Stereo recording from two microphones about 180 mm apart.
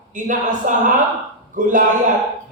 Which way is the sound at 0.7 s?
45° right (ahead or behind).